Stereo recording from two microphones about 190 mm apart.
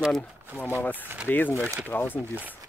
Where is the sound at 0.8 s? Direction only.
10° left (ahead or behind).